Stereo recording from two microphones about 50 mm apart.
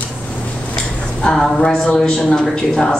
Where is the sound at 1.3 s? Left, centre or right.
Centre.